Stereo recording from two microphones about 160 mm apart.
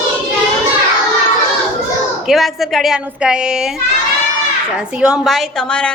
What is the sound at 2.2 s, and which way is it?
Speech, centre (ahead or behind).